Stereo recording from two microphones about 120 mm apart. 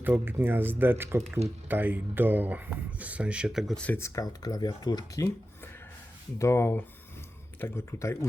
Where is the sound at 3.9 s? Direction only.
25° left (ahead or behind).